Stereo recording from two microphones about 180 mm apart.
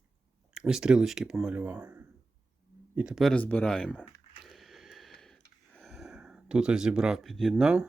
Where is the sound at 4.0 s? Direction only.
Centre (ahead or behind).